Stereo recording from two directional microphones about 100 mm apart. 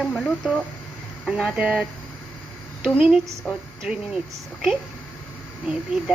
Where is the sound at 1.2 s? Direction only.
10° right (ahead or behind).